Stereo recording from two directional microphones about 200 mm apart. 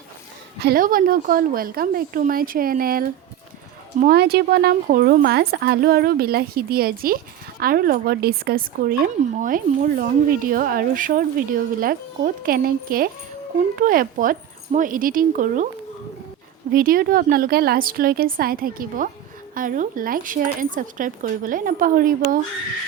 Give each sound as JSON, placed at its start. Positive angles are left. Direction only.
{"t": 0.6, "sound": "speech", "side_deg": -45}
{"t": 16.7, "sound": "speech", "side_deg": -45}